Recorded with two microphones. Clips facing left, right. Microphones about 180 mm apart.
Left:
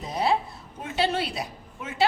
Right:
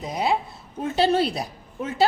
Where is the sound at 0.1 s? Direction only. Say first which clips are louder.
Even; 15° right (ahead or behind).